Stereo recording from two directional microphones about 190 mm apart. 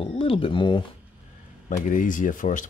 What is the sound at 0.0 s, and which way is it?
Speech, 30° left (ahead or behind).